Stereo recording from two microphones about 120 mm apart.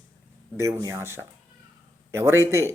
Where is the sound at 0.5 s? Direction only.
25° right (ahead or behind).